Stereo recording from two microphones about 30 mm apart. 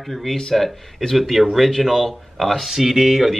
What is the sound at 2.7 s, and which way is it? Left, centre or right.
Speech, centre.